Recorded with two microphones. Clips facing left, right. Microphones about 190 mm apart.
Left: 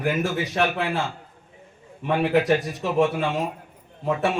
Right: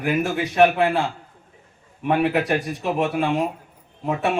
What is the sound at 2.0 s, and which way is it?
Speech, 60° right (ahead or behind).